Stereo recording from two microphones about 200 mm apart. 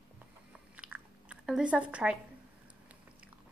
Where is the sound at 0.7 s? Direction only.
5° right (ahead or behind).